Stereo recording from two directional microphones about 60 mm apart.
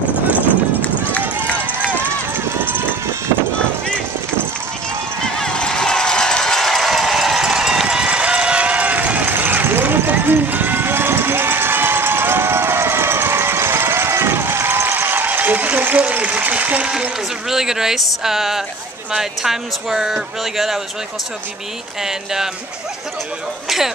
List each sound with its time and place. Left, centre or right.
0.5 s clip-clop: left
1.9 s run: right
5.2 s run: centre; by 16.9 s right
17.5 s speech: centre
22.0 s speech: centre